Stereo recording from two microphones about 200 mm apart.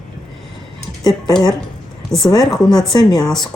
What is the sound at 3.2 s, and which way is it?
Speech, centre (ahead or behind).